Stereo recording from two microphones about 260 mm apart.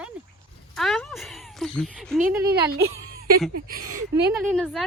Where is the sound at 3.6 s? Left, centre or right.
Right.